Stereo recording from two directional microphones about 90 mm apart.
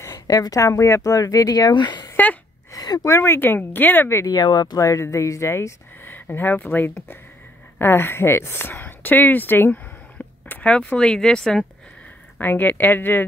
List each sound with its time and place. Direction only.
0.0 s speech: 40° left (ahead or behind)
2.7 s a sound: 45° left (ahead or behind)
3.1 s speech: 30° left (ahead or behind)
4.3 s speech: 50° left (ahead or behind)
4.7 s speech: 35° left (ahead or behind); by 11.6 s 5° left (ahead or behind)
12.4 s speech: 20° left (ahead or behind)